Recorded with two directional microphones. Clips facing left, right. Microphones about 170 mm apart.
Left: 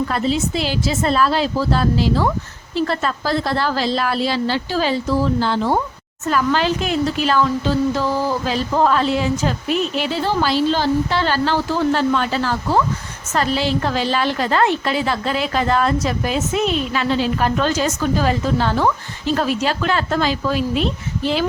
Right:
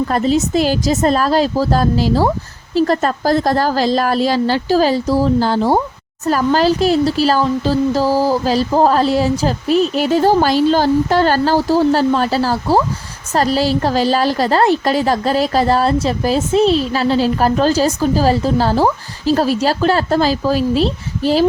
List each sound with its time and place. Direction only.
0.1 s a woman's voice: 45° right (ahead or behind)